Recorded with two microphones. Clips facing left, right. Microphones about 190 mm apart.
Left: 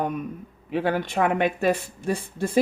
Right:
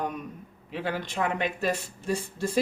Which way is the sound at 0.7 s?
55° left (ahead or behind).